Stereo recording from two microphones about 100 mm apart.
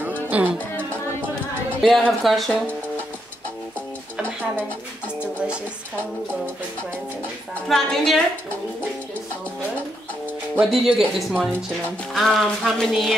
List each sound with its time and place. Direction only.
0.0 s music: 20° right (ahead or behind)
1.8 s music: centre (ahead or behind)
7.6 s music: 5° left (ahead or behind)
10.6 s music: centre (ahead or behind)